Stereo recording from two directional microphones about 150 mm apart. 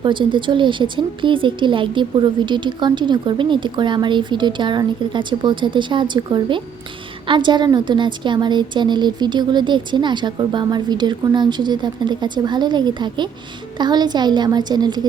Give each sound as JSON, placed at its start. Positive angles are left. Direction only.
{"t": 0.0, "sound": "a woman's voice", "side_deg": -30}